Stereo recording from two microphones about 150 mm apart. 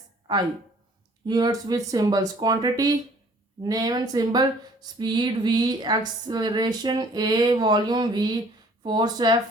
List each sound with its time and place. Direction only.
1.3 s speech: 25° right (ahead or behind)